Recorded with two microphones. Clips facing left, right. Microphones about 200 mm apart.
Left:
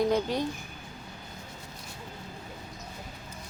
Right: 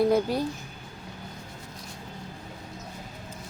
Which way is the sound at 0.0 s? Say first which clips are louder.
Right 3 dB; 10° right (ahead or behind).